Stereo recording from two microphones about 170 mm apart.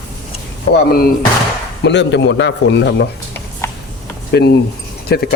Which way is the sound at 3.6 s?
15° left (ahead or behind).